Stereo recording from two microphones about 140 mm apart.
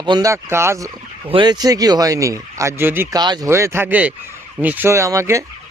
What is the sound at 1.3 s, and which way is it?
Speech, 35° right (ahead or behind).